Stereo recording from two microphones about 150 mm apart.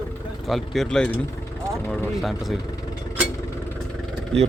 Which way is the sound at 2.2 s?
Centre (ahead or behind).